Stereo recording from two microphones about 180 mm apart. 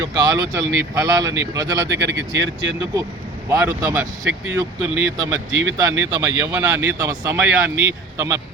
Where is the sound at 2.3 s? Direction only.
85° right.